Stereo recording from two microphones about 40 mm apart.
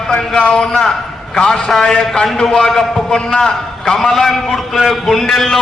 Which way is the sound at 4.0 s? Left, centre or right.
Centre.